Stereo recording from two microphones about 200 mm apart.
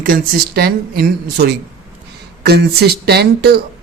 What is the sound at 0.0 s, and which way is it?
Speech, 45° right (ahead or behind).